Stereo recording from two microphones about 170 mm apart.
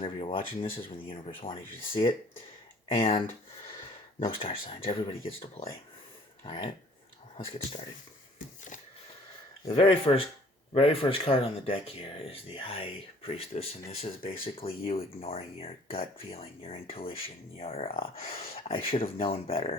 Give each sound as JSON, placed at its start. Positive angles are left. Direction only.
{"t": 0.2, "sound": "speech", "side_deg": 30}
{"t": 2.9, "sound": "speech", "side_deg": 35}
{"t": 9.6, "sound": "speech", "side_deg": 35}
{"t": 18.2, "sound": "speech", "side_deg": 60}
{"t": 18.5, "sound": "speech", "side_deg": 35}